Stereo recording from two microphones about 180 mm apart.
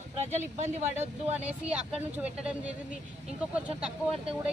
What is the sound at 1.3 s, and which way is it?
A man's voice, 10° right (ahead or behind).